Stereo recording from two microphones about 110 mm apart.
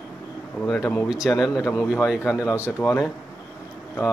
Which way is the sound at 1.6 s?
25° left (ahead or behind).